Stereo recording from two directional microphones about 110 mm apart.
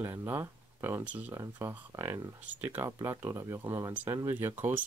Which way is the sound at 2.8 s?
25° right (ahead or behind).